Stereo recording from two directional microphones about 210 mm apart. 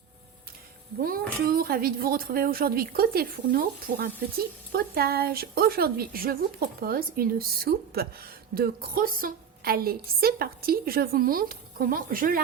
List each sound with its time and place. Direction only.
1.0 s a woman's voice: 45° right (ahead or behind)